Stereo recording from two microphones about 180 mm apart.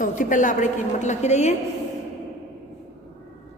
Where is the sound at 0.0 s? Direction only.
45° left (ahead or behind).